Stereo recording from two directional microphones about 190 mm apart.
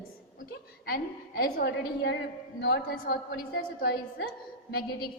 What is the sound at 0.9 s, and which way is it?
A woman's voice, 50° left (ahead or behind).